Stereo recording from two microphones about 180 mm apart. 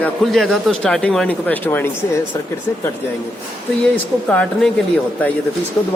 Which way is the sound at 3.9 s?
10° left (ahead or behind).